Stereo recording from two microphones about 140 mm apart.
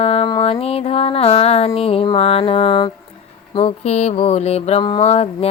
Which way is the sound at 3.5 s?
50° left (ahead or behind).